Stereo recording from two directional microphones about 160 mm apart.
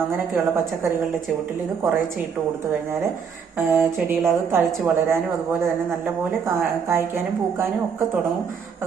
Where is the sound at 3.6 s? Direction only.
15° right (ahead or behind).